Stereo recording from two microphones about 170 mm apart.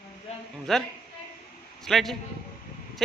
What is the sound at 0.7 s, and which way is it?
A man's voice, centre (ahead or behind).